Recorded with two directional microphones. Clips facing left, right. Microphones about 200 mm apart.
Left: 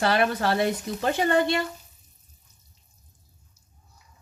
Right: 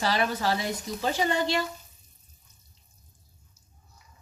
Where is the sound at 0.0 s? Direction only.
55° left (ahead or behind).